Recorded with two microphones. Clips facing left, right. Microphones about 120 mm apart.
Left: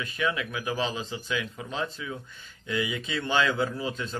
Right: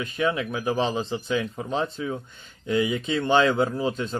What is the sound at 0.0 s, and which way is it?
Speech, 35° right (ahead or behind).